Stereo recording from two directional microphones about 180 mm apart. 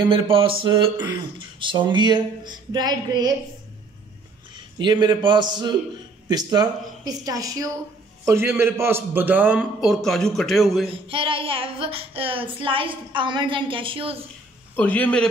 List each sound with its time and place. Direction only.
0.1 s a child's voice: 30° right (ahead or behind)
4.7 s a child's voice: 25° right (ahead or behind); by 10.9 s centre (ahead or behind)
11.1 s a child's voice: 30° right (ahead or behind)
14.8 s a man's voice: 10° left (ahead or behind)